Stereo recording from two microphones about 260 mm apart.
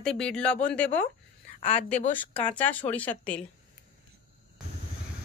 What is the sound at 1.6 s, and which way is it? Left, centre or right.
Speech, left.